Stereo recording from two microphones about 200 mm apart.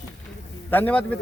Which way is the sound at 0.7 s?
10° left (ahead or behind).